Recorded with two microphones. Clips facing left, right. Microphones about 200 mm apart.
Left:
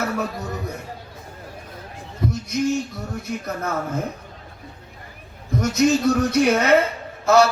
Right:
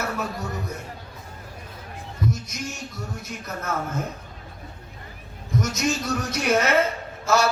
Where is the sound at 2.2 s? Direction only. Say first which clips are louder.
Left 7 dB; 60° left (ahead or behind).